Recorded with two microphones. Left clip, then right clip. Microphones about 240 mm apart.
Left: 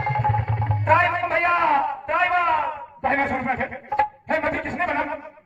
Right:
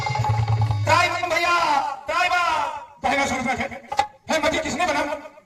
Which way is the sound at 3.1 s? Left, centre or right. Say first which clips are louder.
Even; right.